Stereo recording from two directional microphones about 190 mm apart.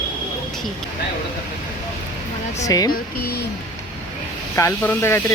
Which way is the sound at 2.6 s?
20° left (ahead or behind).